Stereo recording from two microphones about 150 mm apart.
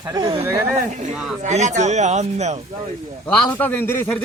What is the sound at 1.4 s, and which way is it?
Speech, 50° right (ahead or behind).